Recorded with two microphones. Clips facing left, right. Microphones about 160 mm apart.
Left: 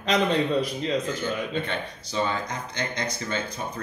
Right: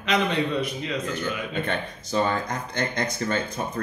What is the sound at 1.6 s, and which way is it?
Speech, 50° right (ahead or behind).